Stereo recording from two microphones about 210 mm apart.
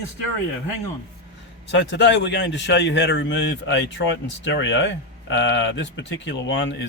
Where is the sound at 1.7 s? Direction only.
60° left (ahead or behind).